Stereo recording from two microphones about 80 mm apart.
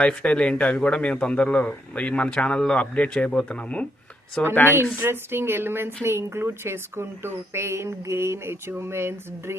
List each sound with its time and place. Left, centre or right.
0.0 s a man's voice: centre
4.9 s speech: right